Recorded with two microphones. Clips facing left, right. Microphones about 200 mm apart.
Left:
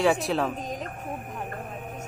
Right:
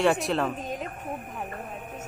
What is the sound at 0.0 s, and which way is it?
Speech, centre (ahead or behind).